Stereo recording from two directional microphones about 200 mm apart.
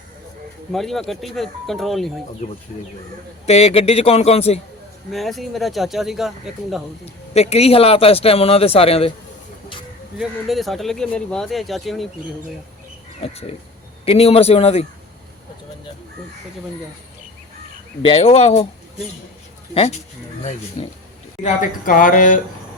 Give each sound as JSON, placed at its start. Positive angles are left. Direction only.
{"t": 0.7, "sound": "speech", "side_deg": 0}
{"t": 3.4, "sound": "a man's voice", "side_deg": 30}
{"t": 5.1, "sound": "speech", "side_deg": 0}
{"t": 7.0, "sound": "speech", "side_deg": 30}
{"t": 10.2, "sound": "speech", "side_deg": 0}
{"t": 13.2, "sound": "a man's voice", "side_deg": 30}
{"t": 18.0, "sound": "speech", "side_deg": 30}
{"t": 21.4, "sound": "speech", "side_deg": 45}